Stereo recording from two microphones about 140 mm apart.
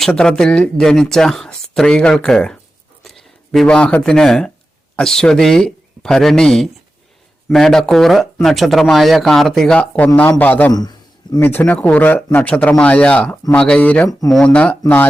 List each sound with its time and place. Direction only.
0.1 s speech: 5° left (ahead or behind)
10.7 s a sound: 30° left (ahead or behind)
11.3 s speech: 15° left (ahead or behind)